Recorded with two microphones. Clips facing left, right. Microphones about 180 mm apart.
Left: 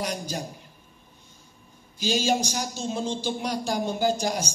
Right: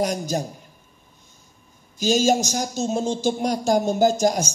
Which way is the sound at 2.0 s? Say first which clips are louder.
Right 6 dB; 45° right (ahead or behind).